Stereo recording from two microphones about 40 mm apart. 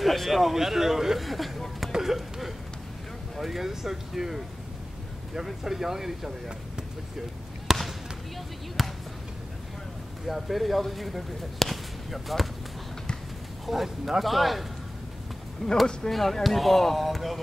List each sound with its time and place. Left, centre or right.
0.0 s speech: centre
1.9 s a sound: centre
3.3 s speech: centre
7.7 s basketball bounce: centre
8.8 s basketball bounce: centre
10.2 s speech: centre
13.7 s speech: centre
15.6 s speech: centre